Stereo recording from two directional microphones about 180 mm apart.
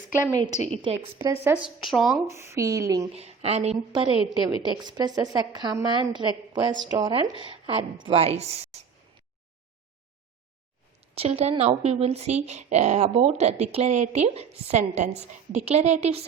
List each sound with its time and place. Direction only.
0.3 s a woman's voice: 20° right (ahead or behind)
1.6 s a woman's voice: centre (ahead or behind)
2.2 s speech: 15° right (ahead or behind)
3.1 s speech: 35° right (ahead or behind)
4.6 s a woman's voice: 25° right (ahead or behind)
11.1 s speech: 35° right (ahead or behind)